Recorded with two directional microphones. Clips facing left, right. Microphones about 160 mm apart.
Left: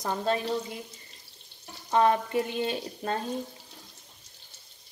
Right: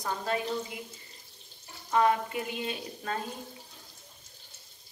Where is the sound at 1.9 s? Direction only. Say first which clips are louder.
Left 2 dB; 25° left (ahead or behind).